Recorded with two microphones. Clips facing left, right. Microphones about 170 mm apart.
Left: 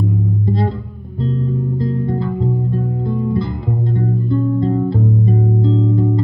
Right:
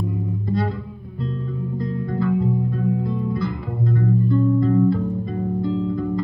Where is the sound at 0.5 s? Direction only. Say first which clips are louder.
Left 4 dB; 25° left (ahead or behind).